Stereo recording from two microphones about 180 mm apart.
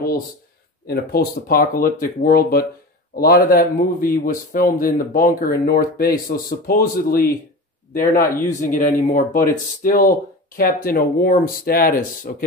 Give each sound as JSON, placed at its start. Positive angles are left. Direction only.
{"t": 0.8, "sound": "speech", "side_deg": 55}